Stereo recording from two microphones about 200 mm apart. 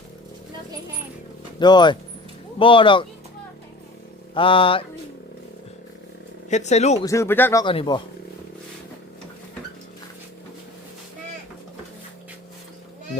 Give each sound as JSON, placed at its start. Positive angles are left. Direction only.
{"t": 1.5, "sound": "music", "side_deg": 20}
{"t": 4.4, "sound": "music", "side_deg": 25}
{"t": 6.5, "sound": "speech", "side_deg": 35}
{"t": 7.0, "sound": "speech", "side_deg": 15}
{"t": 7.6, "sound": "music", "side_deg": 25}